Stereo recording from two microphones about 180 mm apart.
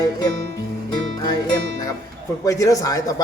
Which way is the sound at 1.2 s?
20° left (ahead or behind).